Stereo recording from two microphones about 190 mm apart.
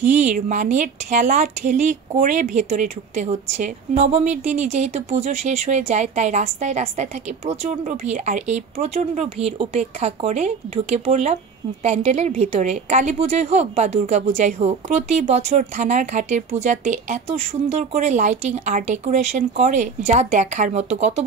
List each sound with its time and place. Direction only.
0.0 s speech: 40° right (ahead or behind)